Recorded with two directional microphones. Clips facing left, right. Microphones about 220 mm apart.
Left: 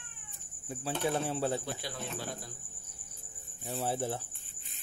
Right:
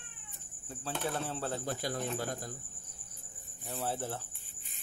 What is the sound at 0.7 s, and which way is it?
Speech, 10° left (ahead or behind).